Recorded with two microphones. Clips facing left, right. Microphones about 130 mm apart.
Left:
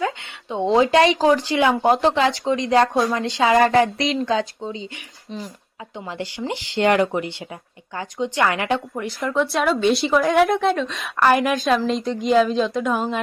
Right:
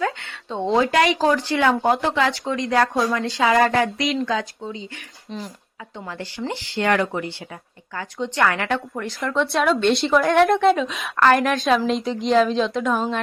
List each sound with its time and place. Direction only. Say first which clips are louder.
0.0 s speech: even; 15° left (ahead or behind)
6.1 s a woman's voice: left 1 dB; 20° left (ahead or behind); by 11.1 s 5° right (ahead or behind)
11.2 s a woman's voice: even; 10° left (ahead or behind)